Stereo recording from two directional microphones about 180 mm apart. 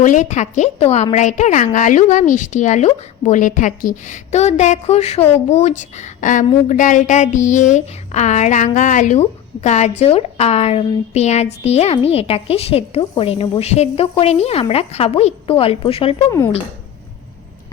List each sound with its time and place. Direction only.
0.0 s a woman's voice: 45° left (ahead or behind)